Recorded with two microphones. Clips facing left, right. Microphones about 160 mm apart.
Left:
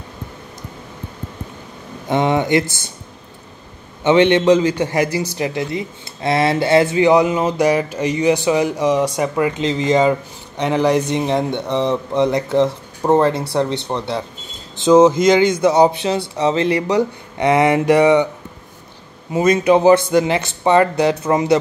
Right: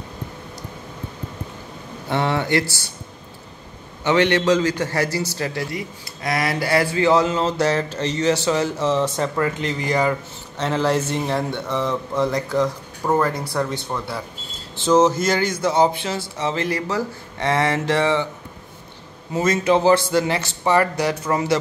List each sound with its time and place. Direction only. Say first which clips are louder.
2.0 s speech: left 5 dB; 15° left (ahead or behind)
4.0 s a man's voice: left 5 dB; 20° left (ahead or behind)
19.3 s a man's voice: left 5 dB; 15° left (ahead or behind)